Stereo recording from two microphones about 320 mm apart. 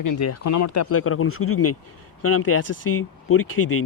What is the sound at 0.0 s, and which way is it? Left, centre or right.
Speech, left.